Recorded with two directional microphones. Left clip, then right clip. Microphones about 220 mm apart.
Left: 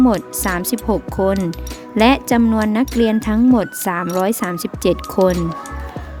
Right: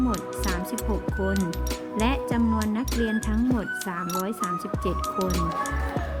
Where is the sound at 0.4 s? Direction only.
45° left (ahead or behind).